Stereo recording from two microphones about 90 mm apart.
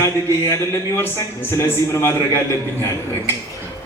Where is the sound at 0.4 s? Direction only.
30° left (ahead or behind).